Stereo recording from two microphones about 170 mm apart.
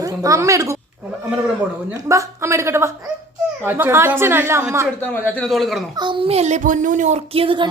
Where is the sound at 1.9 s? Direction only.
20° right (ahead or behind).